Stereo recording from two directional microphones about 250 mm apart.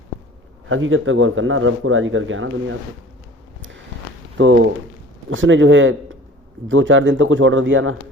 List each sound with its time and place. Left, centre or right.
0.7 s a man's voice: right
4.4 s a man's voice: right